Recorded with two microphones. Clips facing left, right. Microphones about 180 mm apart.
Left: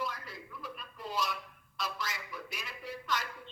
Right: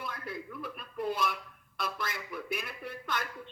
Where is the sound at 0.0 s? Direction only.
55° right (ahead or behind).